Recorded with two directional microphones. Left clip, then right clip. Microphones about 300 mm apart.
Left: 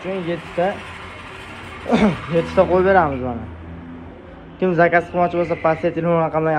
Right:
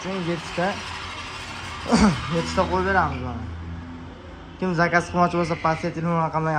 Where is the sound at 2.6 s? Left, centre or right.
Centre.